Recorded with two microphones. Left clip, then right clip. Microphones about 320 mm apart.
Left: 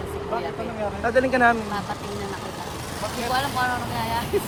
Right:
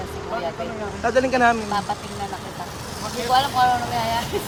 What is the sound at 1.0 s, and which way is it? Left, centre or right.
Speech, centre.